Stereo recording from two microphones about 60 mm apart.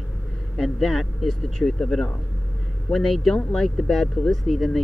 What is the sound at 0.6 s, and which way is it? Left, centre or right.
Speech, centre.